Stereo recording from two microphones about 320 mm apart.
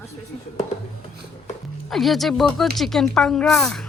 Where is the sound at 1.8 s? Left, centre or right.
Centre.